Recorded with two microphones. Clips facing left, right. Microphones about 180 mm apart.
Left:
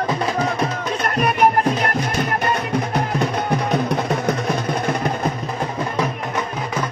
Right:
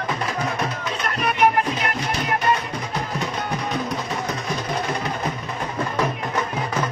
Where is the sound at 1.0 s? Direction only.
45° left (ahead or behind).